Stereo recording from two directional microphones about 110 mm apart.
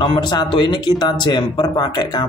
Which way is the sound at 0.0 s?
45° left (ahead or behind).